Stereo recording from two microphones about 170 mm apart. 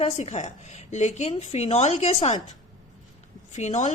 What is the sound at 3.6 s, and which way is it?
Speech, 45° left (ahead or behind).